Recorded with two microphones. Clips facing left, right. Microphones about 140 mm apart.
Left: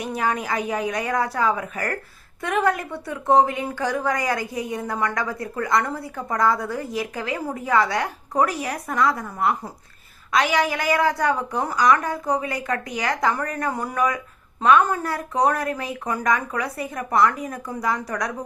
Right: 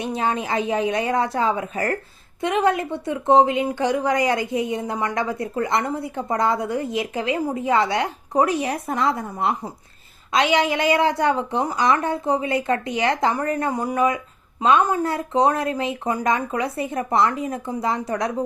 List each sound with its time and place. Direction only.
0.0 s speech: 25° right (ahead or behind)